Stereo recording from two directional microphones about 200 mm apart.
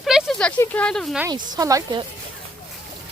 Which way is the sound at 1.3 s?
15° right (ahead or behind).